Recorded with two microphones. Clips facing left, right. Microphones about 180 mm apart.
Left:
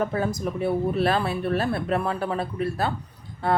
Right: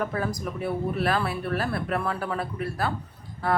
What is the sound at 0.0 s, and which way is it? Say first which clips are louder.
Speech: left 3 dB; 25° left (ahead or behind).